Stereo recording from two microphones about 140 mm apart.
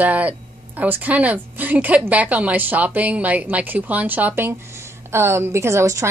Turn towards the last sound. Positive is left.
turn(degrees=-20)  # may be behind; listen again after turning